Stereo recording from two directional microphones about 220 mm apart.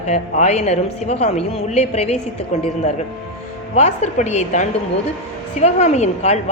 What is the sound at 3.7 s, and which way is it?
A woman's voice, 30° left (ahead or behind).